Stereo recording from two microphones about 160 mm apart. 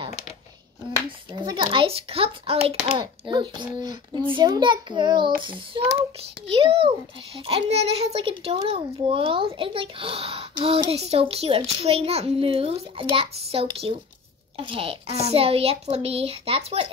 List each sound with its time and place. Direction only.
1.3 s a child's voice: 30° right (ahead or behind)